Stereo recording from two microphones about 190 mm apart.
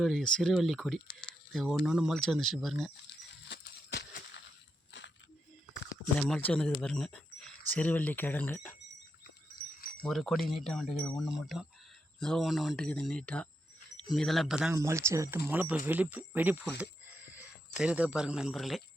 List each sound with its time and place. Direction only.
0.0 s speech: 5° left (ahead or behind)
3.5 s a sound: 65° left (ahead or behind)
5.9 s speech: 5° left (ahead or behind)
10.0 s speech: centre (ahead or behind)
14.8 s speech: 15° right (ahead or behind)
16.6 s a sound: 5° right (ahead or behind)
17.7 s speech: 5° right (ahead or behind)